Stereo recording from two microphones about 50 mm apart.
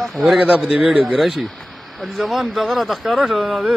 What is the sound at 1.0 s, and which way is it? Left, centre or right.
Speech, centre.